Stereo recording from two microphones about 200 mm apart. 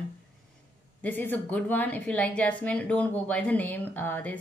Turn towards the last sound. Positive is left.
turn(degrees=10)  # may be behind; listen again after turning